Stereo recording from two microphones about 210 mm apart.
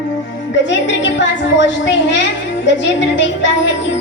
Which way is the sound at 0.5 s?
60° left (ahead or behind).